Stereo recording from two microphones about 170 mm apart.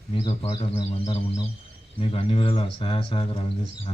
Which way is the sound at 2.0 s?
35° left (ahead or behind).